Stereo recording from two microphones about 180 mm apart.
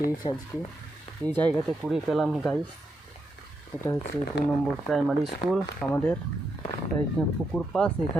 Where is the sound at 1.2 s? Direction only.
10° left (ahead or behind).